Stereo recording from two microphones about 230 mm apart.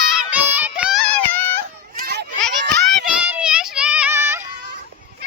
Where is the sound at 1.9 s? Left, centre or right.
Right.